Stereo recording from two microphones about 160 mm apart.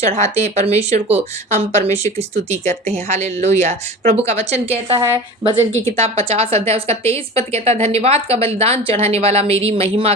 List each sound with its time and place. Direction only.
0.0 s a woman's voice: 45° right (ahead or behind)